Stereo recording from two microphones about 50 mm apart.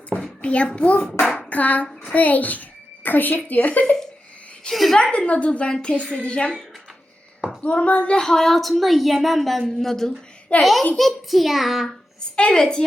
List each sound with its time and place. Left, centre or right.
0.4 s speech: left
1.5 s hands: left
2.1 s a child's voice: left
4.7 s a woman's voice: centre
5.1 s speech: left
7.6 s speech: left
8.2 s speech: centre
12.4 s a woman's voice: centre